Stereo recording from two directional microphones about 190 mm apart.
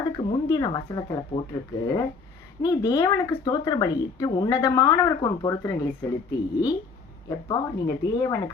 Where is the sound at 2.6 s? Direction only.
20° left (ahead or behind).